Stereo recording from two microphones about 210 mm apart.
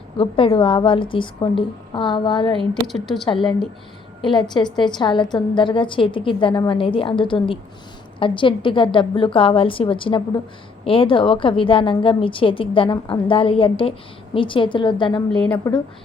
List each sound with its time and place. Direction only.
0.2 s a woman's voice: 25° left (ahead or behind)
2.8 s a woman's voice: centre (ahead or behind)
4.2 s a woman's voice: 20° left (ahead or behind)
15.3 s a woman's voice: 5° left (ahead or behind)
15.5 s speech: 15° left (ahead or behind)